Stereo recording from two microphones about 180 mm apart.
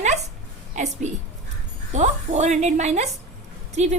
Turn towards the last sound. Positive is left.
turn(degrees=-40)  # may be behind; listen again after turning